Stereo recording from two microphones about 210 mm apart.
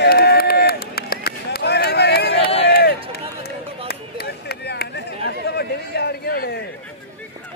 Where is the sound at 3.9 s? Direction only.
50° left (ahead or behind).